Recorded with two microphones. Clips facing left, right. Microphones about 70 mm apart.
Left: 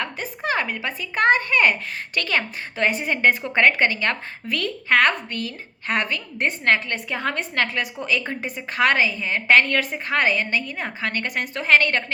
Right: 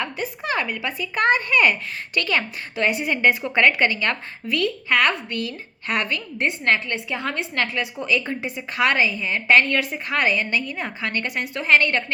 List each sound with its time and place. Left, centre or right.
0.2 s a woman's voice: left